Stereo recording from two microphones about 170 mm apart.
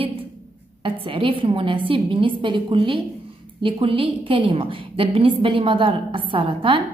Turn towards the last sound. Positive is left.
turn(degrees=-30)  # may be behind; listen again after turning